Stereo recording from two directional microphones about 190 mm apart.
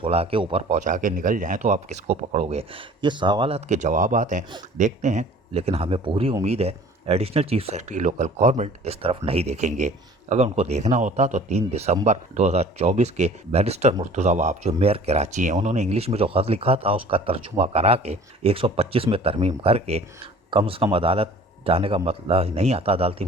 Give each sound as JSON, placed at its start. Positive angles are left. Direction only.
{"t": 0.0, "sound": "speech", "side_deg": -30}